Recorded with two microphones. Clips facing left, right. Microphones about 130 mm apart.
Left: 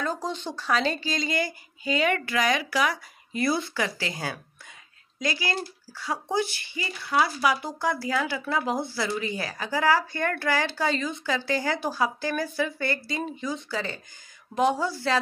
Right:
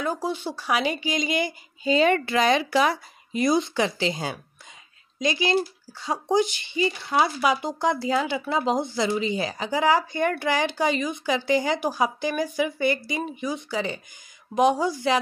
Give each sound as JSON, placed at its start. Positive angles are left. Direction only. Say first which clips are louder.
{"t": 0.0, "sound": "speech", "louder": "right 3 dB", "side_deg": -10}